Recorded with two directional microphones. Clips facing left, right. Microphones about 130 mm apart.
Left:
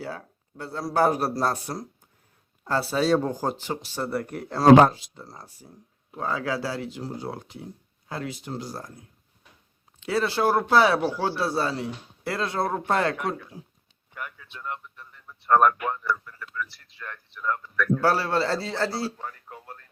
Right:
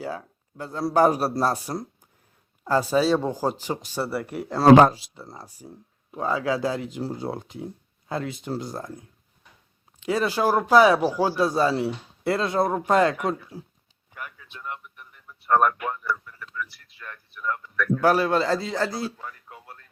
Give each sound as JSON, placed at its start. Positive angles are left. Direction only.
{"t": 0.1, "sound": "speech", "side_deg": -15}
{"t": 2.6, "sound": "speech", "side_deg": -15}
{"t": 3.0, "sound": "speech", "side_deg": 0}
{"t": 10.0, "sound": "speech", "side_deg": -15}
{"t": 13.5, "sound": "speech", "side_deg": -35}
{"t": 14.2, "sound": "a sound", "side_deg": -10}
{"t": 15.5, "sound": "speech", "side_deg": 40}
{"t": 18.0, "sound": "speech", "side_deg": -15}
{"t": 19.2, "sound": "a sound", "side_deg": 35}